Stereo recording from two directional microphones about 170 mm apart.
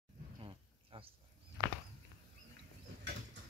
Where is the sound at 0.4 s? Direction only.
30° right (ahead or behind).